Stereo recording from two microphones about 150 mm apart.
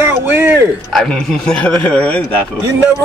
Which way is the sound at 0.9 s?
Centre (ahead or behind).